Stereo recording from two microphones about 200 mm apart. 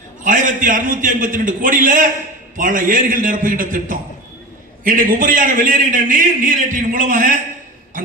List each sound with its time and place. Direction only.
0.3 s a man's voice: 40° right (ahead or behind)